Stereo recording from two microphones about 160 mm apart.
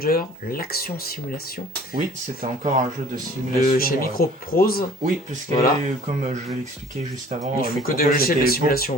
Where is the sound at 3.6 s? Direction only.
65° left (ahead or behind).